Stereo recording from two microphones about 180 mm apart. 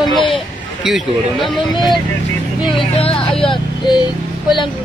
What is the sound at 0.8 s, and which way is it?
Speech, centre (ahead or behind).